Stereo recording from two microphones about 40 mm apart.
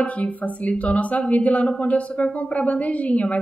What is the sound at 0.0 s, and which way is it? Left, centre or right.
A woman's voice, left.